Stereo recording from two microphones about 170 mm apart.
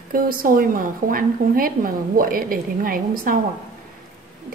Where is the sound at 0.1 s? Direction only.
55° right (ahead or behind).